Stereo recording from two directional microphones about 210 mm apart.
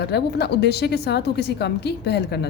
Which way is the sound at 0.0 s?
50° left (ahead or behind).